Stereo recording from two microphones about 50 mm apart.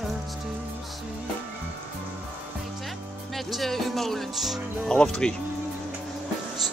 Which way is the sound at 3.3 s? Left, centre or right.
Centre.